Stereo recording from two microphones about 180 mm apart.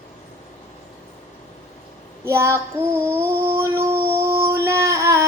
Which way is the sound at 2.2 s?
15° right (ahead or behind).